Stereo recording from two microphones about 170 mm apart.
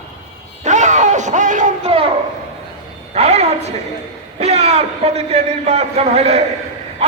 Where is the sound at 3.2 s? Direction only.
40° right (ahead or behind).